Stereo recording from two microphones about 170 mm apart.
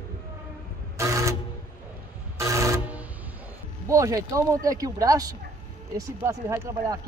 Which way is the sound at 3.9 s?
20° right (ahead or behind).